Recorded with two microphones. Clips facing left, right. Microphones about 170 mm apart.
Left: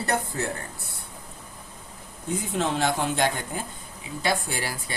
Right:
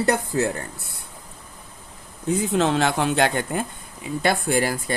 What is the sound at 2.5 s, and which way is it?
Speech, 90° right.